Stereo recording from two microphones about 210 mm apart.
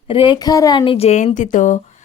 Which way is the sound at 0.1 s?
20° left (ahead or behind).